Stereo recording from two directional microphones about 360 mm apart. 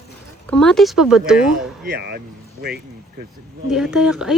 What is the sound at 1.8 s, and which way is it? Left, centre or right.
Speech, right.